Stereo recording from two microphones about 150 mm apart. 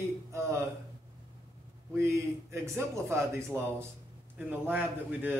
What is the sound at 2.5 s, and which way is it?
A man's voice, 20° right (ahead or behind).